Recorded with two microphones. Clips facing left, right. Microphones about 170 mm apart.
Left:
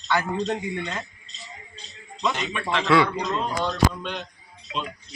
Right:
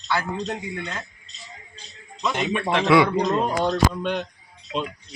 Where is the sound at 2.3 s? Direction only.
55° right (ahead or behind).